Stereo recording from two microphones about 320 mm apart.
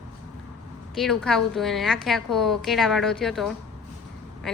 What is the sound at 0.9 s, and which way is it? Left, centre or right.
A woman's voice, centre.